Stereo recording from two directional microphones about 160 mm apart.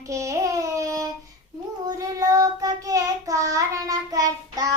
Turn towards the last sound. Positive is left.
turn(degrees=-20)  # may be behind; listen again after turning